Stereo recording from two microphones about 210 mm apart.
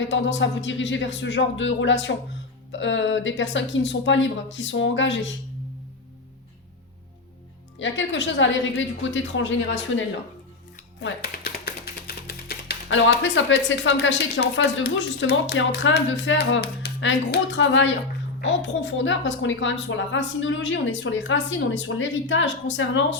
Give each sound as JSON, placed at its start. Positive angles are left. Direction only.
{"t": 0.0, "sound": "speech", "side_deg": 60}
{"t": 7.8, "sound": "speech", "side_deg": 60}
{"t": 11.0, "sound": "speech", "side_deg": 50}